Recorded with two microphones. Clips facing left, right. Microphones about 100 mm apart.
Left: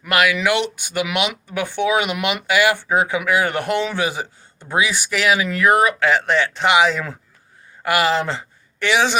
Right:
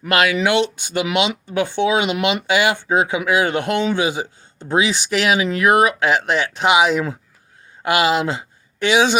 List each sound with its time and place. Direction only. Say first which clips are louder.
0.1 s speech: right 1 dB; 30° right (ahead or behind)